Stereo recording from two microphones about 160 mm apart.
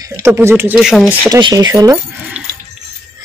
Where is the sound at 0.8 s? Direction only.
5° right (ahead or behind).